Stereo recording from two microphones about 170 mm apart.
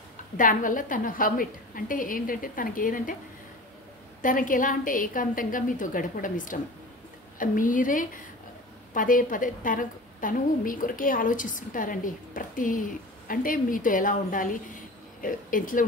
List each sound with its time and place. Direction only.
0.4 s a woman's voice: 50° left (ahead or behind)
4.2 s a woman's voice: 50° left (ahead or behind)